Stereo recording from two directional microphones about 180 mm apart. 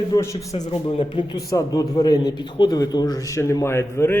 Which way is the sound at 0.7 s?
30° left (ahead or behind).